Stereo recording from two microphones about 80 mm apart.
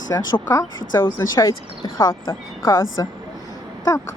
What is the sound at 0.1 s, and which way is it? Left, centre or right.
A woman's voice, left.